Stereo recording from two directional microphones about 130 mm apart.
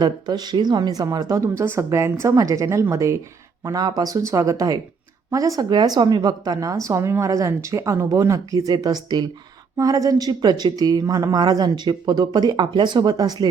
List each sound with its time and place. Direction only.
0.0 s a woman's voice: 30° right (ahead or behind)